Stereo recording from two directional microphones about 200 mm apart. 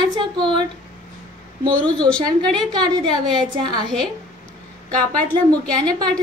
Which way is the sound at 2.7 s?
20° right (ahead or behind).